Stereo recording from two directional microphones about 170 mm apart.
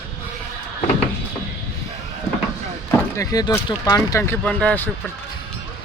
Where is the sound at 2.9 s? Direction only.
20° left (ahead or behind).